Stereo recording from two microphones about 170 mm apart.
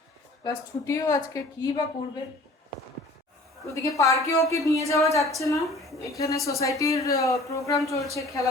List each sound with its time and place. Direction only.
0.4 s a woman's voice: 20° left (ahead or behind)
3.8 s a woman's voice: 20° left (ahead or behind)
5.5 s a woman's voice: centre (ahead or behind)
6.1 s a woman's voice: 20° left (ahead or behind)